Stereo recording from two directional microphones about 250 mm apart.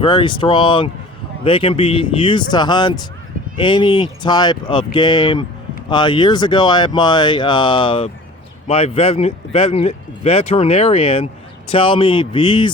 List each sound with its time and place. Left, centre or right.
0.0 s speech: centre